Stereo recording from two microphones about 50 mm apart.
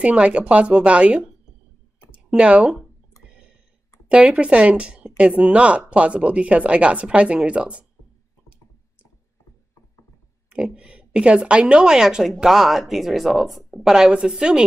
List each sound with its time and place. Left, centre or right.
0.0 s speech: right
3.2 s clicking: right
4.1 s speech: right
10.5 s a woman's voice: right